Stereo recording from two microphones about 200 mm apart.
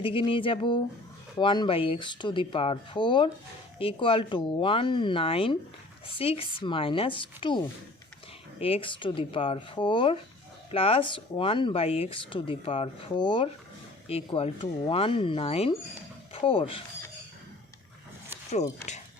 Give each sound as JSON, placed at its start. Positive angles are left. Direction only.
{"t": 0.0, "sound": "speech", "side_deg": 25}
{"t": 8.6, "sound": "speech", "side_deg": 25}